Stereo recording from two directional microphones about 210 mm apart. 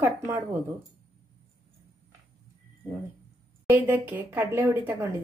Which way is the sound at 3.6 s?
10° right (ahead or behind).